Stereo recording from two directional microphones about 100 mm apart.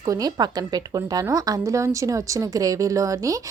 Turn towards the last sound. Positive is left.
turn(degrees=-35)  # may be behind; listen again after turning